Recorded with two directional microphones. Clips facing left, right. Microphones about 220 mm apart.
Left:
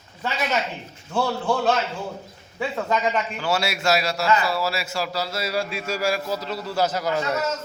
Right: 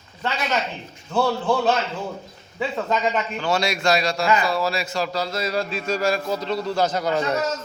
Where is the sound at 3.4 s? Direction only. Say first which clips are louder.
Right 2 dB; 5° left (ahead or behind).